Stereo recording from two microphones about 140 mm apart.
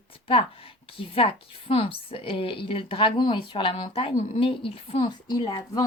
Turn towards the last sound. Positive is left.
turn(degrees=35)  # may be behind; listen again after turning